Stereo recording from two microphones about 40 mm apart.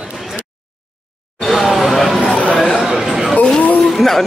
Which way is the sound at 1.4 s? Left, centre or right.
Centre.